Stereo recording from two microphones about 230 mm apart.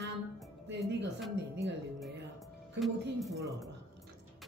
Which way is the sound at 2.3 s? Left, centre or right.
Centre.